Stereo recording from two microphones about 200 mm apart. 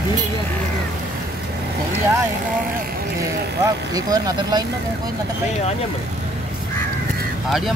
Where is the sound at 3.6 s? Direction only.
20° right (ahead or behind).